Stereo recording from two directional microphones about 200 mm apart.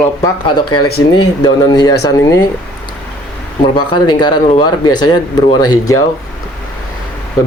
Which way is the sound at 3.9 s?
20° left (ahead or behind).